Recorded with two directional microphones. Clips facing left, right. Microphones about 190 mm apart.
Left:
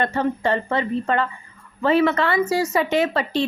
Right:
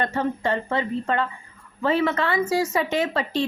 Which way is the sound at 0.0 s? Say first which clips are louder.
Left 3 dB; 65° left (ahead or behind).